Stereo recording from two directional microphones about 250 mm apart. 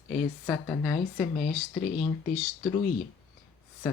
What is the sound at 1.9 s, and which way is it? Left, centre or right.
Speech, left.